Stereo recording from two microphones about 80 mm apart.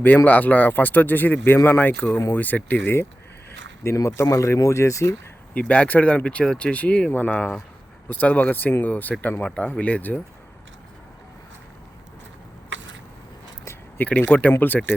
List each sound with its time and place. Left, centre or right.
0.3 s speech: centre
3.8 s speech: left
5.5 s speech: centre
14.0 s speech: left